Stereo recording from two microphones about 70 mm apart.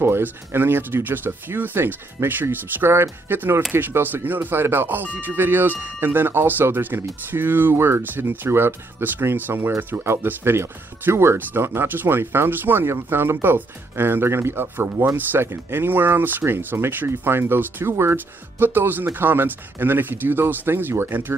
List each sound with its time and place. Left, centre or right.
0.0 s speech: right